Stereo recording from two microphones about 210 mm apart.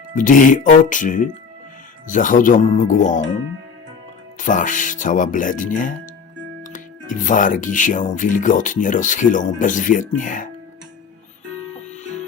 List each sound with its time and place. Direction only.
0.2 s speech: 40° left (ahead or behind)
4.4 s speech: 40° left (ahead or behind)